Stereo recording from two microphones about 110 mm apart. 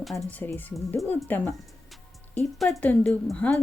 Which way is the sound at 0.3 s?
15° left (ahead or behind).